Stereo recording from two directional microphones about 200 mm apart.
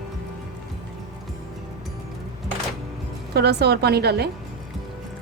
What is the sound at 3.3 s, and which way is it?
Speech, 55° right (ahead or behind).